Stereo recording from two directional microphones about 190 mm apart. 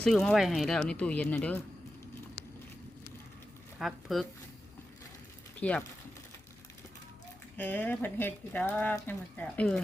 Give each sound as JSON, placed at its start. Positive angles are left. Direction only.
{"t": 0.0, "sound": "speech", "side_deg": 5}
{"t": 3.8, "sound": "speech", "side_deg": 0}
{"t": 5.5, "sound": "speech", "side_deg": 5}
{"t": 7.5, "sound": "speech", "side_deg": 10}